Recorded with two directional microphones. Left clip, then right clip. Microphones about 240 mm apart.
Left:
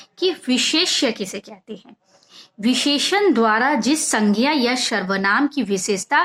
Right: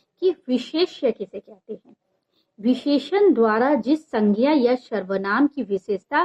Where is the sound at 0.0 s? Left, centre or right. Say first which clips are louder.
Left 1 dB; centre.